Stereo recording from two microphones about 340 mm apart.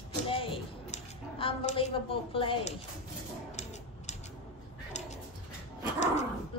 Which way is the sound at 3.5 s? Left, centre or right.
Centre.